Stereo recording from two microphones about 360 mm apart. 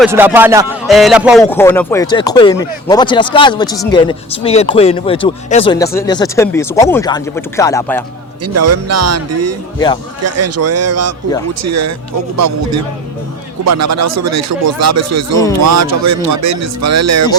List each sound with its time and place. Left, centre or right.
0.0 s speech: centre
8.5 s speech: right
9.7 s speech: centre
10.2 s speech: right